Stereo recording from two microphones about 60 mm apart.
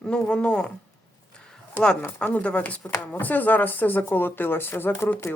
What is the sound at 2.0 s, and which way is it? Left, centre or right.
Speech, left.